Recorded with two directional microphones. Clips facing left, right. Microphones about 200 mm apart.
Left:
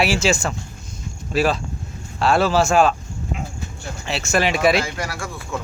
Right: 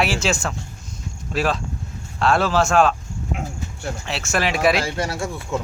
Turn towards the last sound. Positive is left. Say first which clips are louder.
# right 4 dB
turn(degrees=-25)  # may be behind; listen again after turning